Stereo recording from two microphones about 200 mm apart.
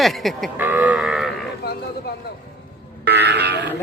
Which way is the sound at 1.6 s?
55° left (ahead or behind).